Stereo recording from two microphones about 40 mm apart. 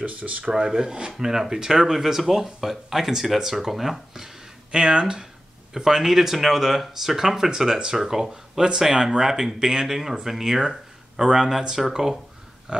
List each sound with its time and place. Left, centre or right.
0.0 s speech: right
0.5 s speech: centre
4.7 s speech: right
5.7 s speech: centre
8.9 s speech: right
9.2 s speech: centre